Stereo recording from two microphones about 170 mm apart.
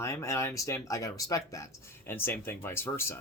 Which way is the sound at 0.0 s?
15° left (ahead or behind).